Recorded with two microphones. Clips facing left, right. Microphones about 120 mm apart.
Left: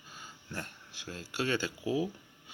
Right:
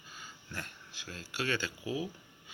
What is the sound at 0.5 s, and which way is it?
Speech, 25° left (ahead or behind).